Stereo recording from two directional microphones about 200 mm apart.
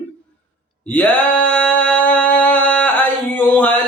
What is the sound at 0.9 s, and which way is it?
Singing, 10° left (ahead or behind).